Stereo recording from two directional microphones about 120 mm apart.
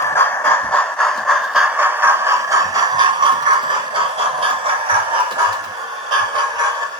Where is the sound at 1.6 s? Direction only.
15° right (ahead or behind); by 4.7 s 50° right (ahead or behind).